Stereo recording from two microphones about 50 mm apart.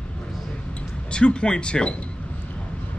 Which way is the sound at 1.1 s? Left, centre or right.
Centre.